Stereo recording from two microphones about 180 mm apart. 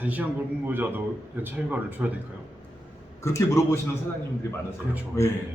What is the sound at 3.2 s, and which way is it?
Speech, 15° left (ahead or behind).